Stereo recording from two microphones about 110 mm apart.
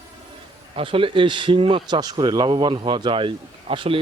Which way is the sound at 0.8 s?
55° right (ahead or behind).